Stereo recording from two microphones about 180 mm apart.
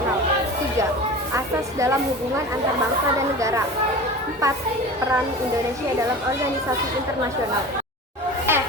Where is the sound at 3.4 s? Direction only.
15° right (ahead or behind).